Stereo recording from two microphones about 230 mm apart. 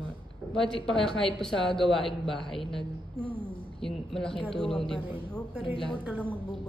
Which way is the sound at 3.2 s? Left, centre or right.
Right.